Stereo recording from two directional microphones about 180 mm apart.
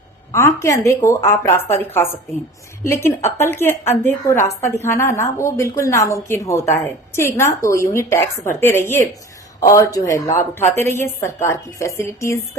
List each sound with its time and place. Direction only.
0.3 s a woman's voice: 15° left (ahead or behind)